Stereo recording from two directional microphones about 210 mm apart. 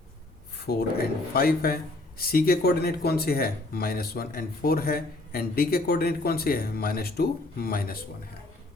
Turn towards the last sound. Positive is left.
turn(degrees=45)  # may be behind; listen again after turning